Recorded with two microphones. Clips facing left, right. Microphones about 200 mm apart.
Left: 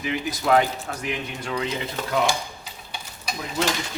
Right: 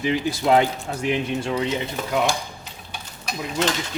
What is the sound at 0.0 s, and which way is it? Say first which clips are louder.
A man's voice: right 4 dB; 30° right (ahead or behind).